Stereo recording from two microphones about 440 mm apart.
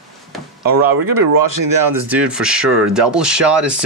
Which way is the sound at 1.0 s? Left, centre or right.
Right.